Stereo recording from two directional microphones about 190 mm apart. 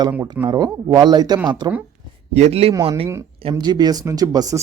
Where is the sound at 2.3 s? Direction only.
35° right (ahead or behind).